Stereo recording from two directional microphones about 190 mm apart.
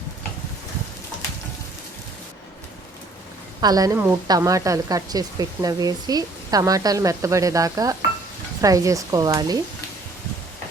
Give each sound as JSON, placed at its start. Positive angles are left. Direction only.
{"t": 3.6, "sound": "a woman's voice", "side_deg": -20}